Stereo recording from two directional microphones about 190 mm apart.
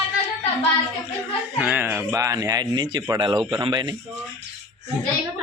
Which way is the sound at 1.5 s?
10° right (ahead or behind).